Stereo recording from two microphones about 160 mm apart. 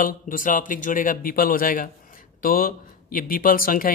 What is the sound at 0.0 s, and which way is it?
Speech, 55° left (ahead or behind).